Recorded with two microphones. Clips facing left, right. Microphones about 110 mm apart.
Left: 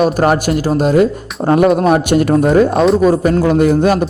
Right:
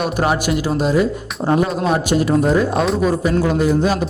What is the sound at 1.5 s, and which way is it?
Speech, 60° left (ahead or behind).